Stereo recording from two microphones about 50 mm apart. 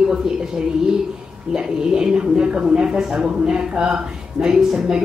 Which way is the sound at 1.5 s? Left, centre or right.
Centre.